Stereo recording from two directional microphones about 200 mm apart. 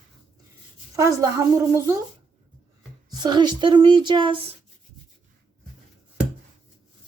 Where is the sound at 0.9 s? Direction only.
15° right (ahead or behind).